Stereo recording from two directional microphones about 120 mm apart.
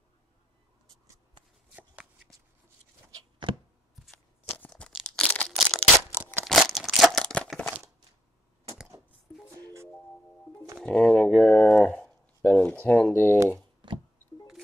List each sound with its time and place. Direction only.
3.9 s shuffling cards: centre (ahead or behind)
4.5 s a sound: 10° left (ahead or behind)
10.8 s pigeon: 10° left (ahead or behind)
11.3 s a sound: 5° left (ahead or behind)
12.8 s speech: 10° left (ahead or behind)
13.8 s music: 40° right (ahead or behind)